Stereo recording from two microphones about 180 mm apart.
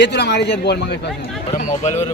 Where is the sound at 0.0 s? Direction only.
70° left (ahead or behind).